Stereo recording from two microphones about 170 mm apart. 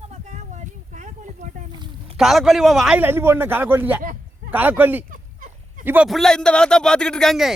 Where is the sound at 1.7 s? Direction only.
25° right (ahead or behind).